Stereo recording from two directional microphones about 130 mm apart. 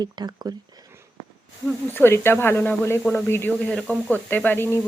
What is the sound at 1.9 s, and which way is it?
Speech, 15° left (ahead or behind).